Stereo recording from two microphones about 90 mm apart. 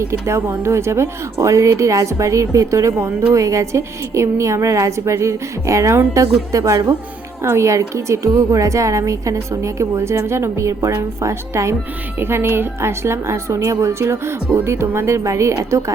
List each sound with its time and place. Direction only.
0.0 s a woman's voice: 30° right (ahead or behind)